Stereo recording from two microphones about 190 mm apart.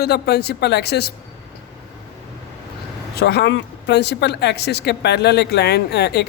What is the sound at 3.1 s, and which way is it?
Speech, 60° left (ahead or behind).